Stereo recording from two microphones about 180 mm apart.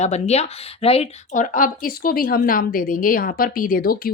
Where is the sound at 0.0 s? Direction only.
40° left (ahead or behind).